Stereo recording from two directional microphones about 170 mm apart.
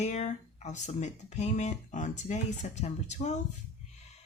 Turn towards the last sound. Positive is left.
turn(degrees=45)  # may be behind; listen again after turning